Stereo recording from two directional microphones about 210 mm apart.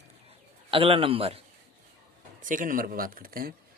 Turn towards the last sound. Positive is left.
turn(degrees=-45)  # may be behind; listen again after turning